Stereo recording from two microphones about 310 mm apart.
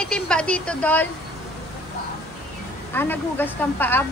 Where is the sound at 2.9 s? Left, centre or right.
Centre.